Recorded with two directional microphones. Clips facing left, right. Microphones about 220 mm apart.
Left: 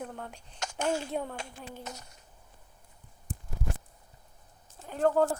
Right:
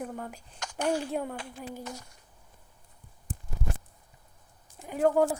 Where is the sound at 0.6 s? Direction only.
25° left (ahead or behind).